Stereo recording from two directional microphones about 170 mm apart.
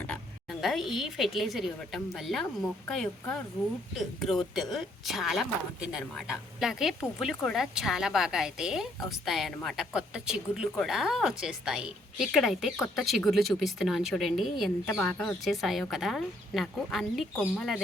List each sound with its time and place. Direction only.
0.6 s a woman's voice: centre (ahead or behind)